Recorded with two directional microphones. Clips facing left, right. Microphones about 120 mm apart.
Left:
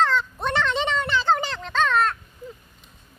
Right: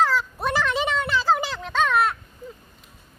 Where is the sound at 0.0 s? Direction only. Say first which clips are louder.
Even; 5° right (ahead or behind).